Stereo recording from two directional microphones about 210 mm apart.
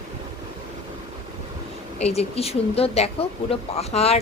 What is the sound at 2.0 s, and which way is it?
Speech, 30° left (ahead or behind).